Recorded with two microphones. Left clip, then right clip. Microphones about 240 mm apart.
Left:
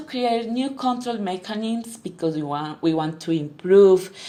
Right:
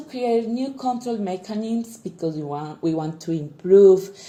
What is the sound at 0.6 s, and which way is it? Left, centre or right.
Speech, left.